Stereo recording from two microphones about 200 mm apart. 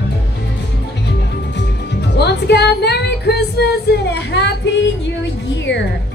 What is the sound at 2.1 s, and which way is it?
Music, 55° left (ahead or behind).